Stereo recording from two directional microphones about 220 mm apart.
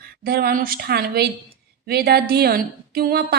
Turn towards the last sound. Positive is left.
turn(degrees=-45)  # may be behind; listen again after turning